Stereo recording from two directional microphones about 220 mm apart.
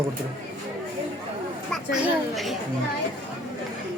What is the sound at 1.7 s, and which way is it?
Chatter, centre (ahead or behind).